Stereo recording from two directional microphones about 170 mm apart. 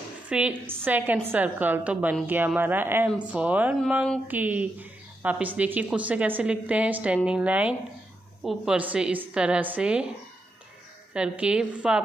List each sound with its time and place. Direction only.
0.3 s a woman's voice: 10° right (ahead or behind)
11.1 s a woman's voice: 5° right (ahead or behind)